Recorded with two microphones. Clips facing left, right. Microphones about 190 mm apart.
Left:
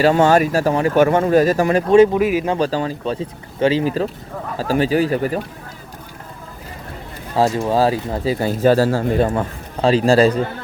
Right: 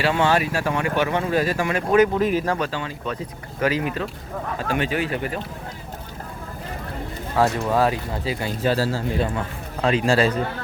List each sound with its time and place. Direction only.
0.0 s speech: 40° left (ahead or behind)
2.1 s speech: 10° left (ahead or behind)
2.6 s speech: 40° left (ahead or behind)
7.3 s speech: 30° left (ahead or behind); by 9.5 s 45° left (ahead or behind)
9.8 s speech: 35° left (ahead or behind)